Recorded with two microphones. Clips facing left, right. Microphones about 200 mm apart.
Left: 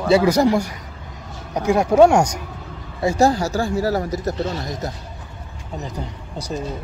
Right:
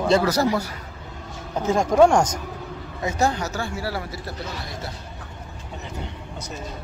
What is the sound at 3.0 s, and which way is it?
Speech, 35° left (ahead or behind).